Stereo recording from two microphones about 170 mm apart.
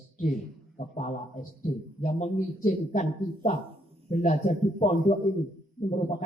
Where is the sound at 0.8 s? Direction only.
50° left (ahead or behind).